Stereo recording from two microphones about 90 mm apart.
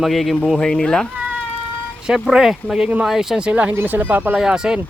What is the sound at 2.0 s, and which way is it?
Speech, 10° right (ahead or behind).